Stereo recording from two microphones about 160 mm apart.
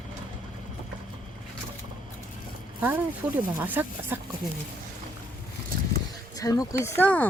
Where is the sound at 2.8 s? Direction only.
10° right (ahead or behind).